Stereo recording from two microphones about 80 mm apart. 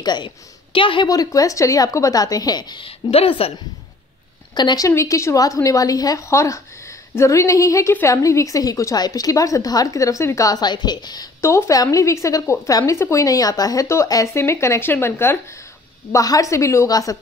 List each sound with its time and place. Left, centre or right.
0.0 s a woman's voice: left
0.7 s a woman's voice: left
1.0 s a woman's voice: left
4.6 s a woman's voice: left
4.8 s a woman's voice: left
11.4 s a woman's voice: left
14.3 s a woman's voice: left
16.1 s a woman's voice: left